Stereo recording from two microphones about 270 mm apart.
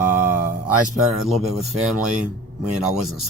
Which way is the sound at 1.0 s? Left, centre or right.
Centre.